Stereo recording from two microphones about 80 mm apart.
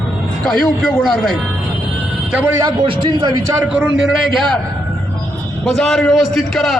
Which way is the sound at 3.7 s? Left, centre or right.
Centre.